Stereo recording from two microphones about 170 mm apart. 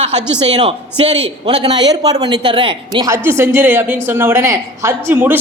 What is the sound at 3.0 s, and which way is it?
Speech, 15° right (ahead or behind).